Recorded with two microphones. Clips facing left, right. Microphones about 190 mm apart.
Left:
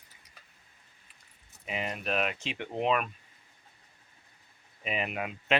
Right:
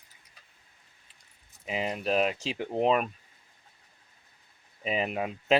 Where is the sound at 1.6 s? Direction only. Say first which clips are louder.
Right 4 dB; 25° right (ahead or behind).